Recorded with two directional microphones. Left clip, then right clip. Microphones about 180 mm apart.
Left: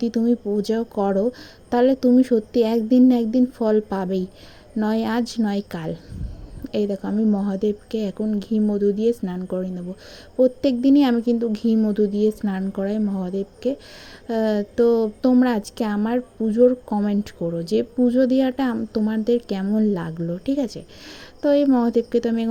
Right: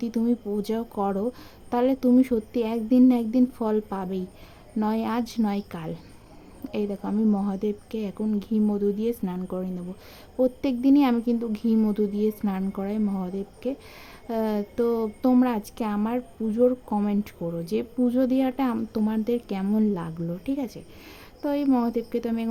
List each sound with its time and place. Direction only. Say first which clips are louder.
0.0 s a woman's voice: left 5 dB; 15° left (ahead or behind)
19.9 s a woman's voice: left 5 dB; 15° left (ahead or behind)